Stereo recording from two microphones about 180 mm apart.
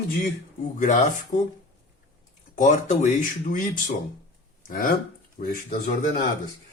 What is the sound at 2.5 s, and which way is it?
Speech, 40° left (ahead or behind).